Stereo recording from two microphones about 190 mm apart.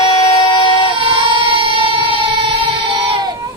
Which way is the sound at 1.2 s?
25° right (ahead or behind).